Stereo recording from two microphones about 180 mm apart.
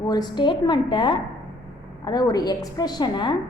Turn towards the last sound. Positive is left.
turn(degrees=25)  # may be behind; listen again after turning